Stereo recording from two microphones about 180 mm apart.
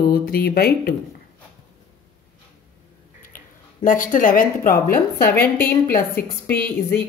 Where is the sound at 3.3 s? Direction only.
50° left (ahead or behind).